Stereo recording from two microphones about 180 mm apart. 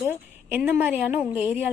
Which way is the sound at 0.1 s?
10° right (ahead or behind).